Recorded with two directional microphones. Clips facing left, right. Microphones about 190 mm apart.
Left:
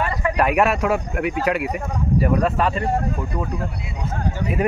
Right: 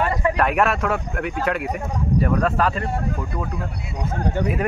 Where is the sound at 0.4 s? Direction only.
5° left (ahead or behind).